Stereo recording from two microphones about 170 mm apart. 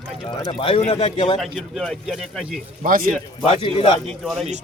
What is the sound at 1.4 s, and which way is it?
Speech, centre (ahead or behind).